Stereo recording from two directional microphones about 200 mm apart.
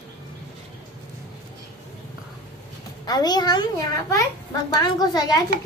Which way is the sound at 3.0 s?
20° left (ahead or behind).